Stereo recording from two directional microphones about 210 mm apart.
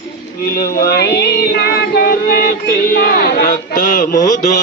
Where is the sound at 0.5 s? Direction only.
45° left (ahead or behind).